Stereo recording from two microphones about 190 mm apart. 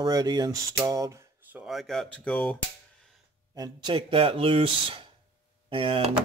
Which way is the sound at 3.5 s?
20° right (ahead or behind).